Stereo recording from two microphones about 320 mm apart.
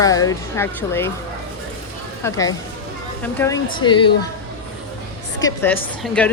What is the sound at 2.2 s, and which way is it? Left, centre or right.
Speech, centre.